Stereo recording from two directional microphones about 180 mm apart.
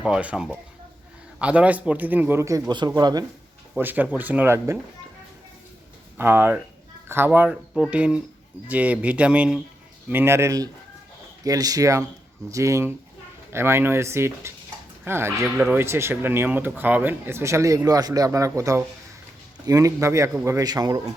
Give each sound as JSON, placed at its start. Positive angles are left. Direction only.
{"t": 0.0, "sound": "speech", "side_deg": -5}
{"t": 3.8, "sound": "speech", "side_deg": -10}
{"t": 6.1, "sound": "speech", "side_deg": -10}